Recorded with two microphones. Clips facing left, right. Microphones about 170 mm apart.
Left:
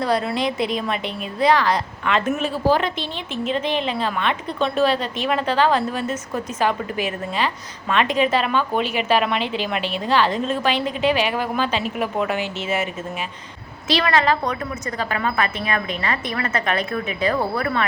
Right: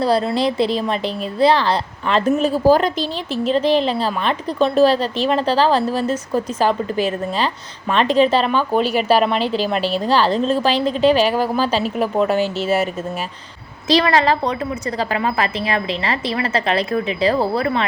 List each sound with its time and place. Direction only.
0.0 s a woman's voice: 30° right (ahead or behind)